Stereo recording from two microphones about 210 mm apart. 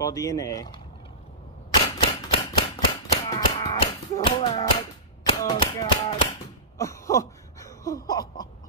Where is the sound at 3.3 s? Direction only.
20° left (ahead or behind).